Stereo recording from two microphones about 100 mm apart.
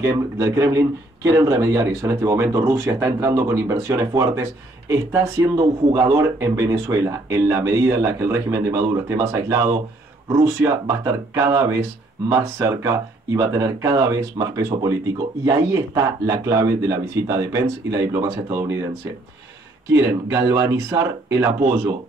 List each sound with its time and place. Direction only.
0.0 s speech: 30° right (ahead or behind)
19.9 s speech: 25° right (ahead or behind)